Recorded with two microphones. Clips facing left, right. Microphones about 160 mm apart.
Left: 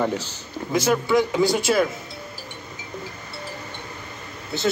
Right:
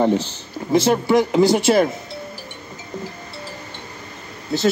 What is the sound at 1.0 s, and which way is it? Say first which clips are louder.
Speech: right 4 dB; 45° right (ahead or behind).